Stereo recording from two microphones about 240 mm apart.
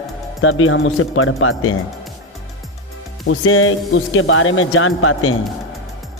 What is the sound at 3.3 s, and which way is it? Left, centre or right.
Speech, left.